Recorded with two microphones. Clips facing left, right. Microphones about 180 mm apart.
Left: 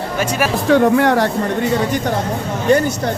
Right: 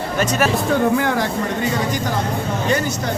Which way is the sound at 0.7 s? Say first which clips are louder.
Left 10 dB; 65° left (ahead or behind).